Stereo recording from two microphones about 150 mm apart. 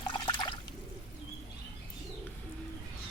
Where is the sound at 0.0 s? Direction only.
30° left (ahead or behind).